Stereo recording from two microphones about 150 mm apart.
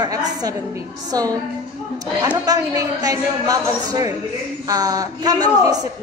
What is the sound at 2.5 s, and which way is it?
A woman's voice, 25° right (ahead or behind).